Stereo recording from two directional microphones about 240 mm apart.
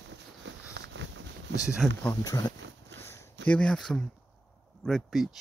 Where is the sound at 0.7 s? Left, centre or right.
Right.